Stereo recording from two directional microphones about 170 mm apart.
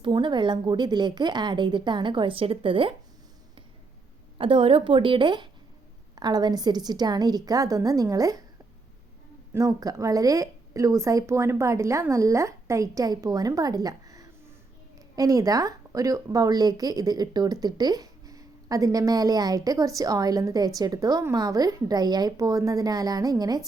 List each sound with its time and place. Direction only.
0.0 s speech: 25° right (ahead or behind)
4.4 s speech: 30° right (ahead or behind)
9.5 s speech: 20° right (ahead or behind)